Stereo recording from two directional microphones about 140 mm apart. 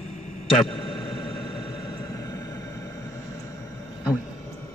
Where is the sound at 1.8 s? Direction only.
25° left (ahead or behind).